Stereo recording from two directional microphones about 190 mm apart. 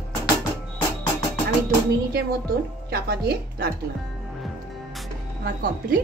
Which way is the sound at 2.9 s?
55° right (ahead or behind).